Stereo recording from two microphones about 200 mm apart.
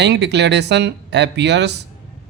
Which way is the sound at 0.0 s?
55° right (ahead or behind).